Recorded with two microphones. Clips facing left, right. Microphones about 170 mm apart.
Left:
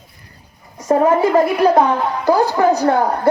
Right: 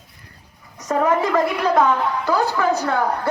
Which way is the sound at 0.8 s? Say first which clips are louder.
Left 5 dB; 30° left (ahead or behind).